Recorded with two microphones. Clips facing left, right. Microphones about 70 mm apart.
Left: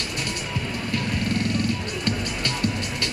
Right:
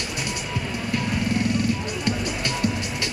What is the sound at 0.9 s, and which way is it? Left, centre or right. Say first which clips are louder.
Music: right 2 dB; centre.